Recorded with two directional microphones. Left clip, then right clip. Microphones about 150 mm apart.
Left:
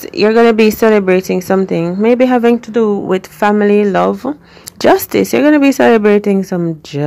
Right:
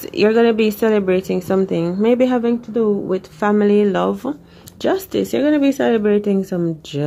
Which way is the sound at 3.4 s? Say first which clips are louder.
Left 4 dB; 25° left (ahead or behind).